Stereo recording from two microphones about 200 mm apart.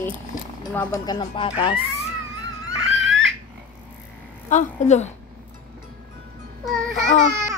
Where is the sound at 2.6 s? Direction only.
70° right (ahead or behind).